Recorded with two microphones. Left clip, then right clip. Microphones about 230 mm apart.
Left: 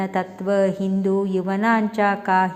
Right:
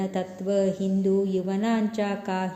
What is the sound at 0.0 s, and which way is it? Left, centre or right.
A woman's voice, centre.